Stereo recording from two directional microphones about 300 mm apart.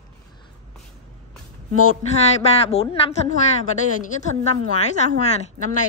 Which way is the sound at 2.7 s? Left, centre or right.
Centre.